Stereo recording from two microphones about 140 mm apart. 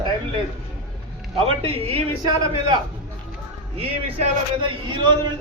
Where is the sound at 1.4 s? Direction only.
40° right (ahead or behind).